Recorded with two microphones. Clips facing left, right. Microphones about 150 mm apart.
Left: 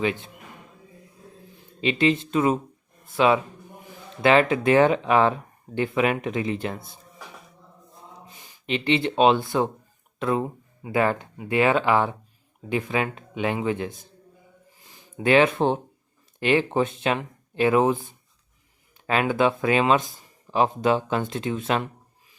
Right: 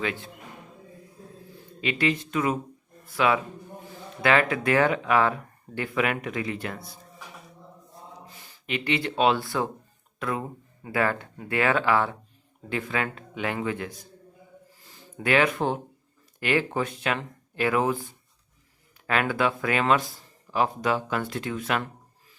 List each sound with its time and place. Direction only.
0.0 s speech: 20° left (ahead or behind)
1.8 s speech: 25° left (ahead or behind)
8.3 s speech: 20° left (ahead or behind)
14.8 s a sound: 20° left (ahead or behind)
16.4 s speech: 25° left (ahead or behind)